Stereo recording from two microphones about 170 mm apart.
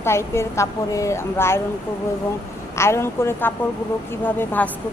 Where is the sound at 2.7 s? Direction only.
15° left (ahead or behind).